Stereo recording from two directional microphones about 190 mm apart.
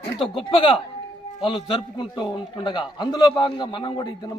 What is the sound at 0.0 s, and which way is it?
A man's voice, 30° left (ahead or behind).